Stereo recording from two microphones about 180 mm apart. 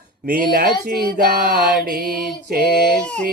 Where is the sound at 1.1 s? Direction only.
60° right (ahead or behind).